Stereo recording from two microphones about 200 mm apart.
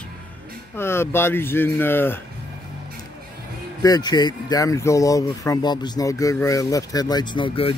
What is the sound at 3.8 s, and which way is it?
Speech, 20° left (ahead or behind).